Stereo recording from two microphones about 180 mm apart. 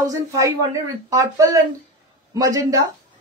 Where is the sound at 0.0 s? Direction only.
15° right (ahead or behind).